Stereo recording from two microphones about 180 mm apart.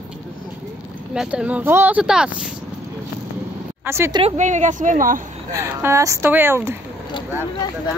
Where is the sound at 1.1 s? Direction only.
5° right (ahead or behind).